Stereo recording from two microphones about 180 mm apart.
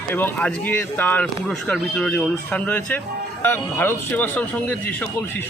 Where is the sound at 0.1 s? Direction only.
10° left (ahead or behind).